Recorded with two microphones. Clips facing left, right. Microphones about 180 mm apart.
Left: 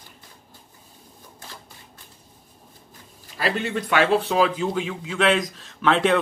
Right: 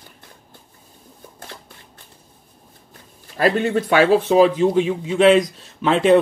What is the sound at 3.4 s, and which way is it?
Speech, 45° right (ahead or behind).